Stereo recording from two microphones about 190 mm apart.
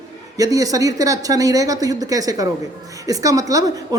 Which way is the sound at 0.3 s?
20° right (ahead or behind).